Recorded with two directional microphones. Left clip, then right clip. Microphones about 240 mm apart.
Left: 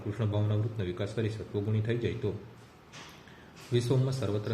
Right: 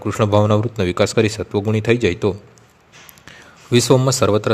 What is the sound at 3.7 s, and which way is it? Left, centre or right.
Speech, right.